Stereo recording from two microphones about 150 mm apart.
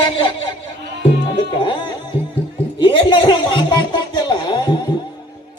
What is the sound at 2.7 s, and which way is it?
Music, 35° left (ahead or behind).